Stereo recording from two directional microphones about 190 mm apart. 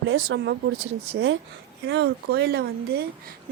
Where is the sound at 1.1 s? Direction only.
90° right.